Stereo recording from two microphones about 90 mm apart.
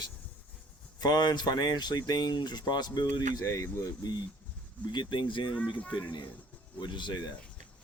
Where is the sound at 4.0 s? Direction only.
50° left (ahead or behind).